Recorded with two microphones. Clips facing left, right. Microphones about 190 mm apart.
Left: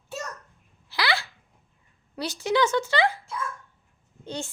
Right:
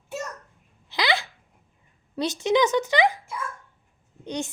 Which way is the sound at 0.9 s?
20° right (ahead or behind).